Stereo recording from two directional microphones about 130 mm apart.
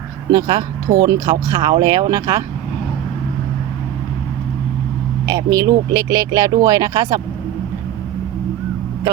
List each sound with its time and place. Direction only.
0.3 s speech: 30° right (ahead or behind)
5.2 s speech: 30° right (ahead or behind)